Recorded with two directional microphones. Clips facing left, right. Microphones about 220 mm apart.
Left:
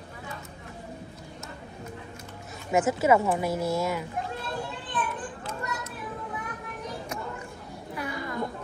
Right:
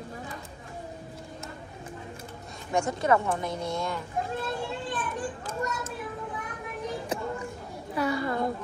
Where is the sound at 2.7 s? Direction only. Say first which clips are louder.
Left 3 dB; 5° left (ahead or behind).